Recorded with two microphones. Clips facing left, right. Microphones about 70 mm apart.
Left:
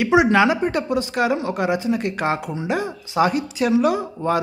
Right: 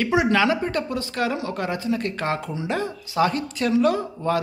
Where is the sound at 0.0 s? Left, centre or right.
Centre.